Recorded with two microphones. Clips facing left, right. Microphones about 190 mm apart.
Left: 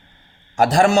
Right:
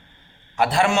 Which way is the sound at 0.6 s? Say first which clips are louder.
Left 5 dB; 40° left (ahead or behind).